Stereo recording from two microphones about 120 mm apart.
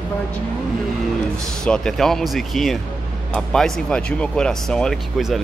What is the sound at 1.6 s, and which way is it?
Speech, 5° left (ahead or behind).